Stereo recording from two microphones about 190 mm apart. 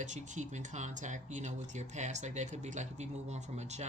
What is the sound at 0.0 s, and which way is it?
Speech, 40° right (ahead or behind).